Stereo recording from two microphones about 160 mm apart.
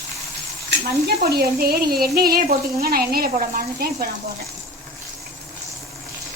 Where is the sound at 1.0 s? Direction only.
80° right.